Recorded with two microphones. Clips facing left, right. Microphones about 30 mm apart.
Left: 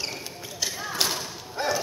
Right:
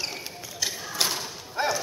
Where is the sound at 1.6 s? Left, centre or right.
Centre.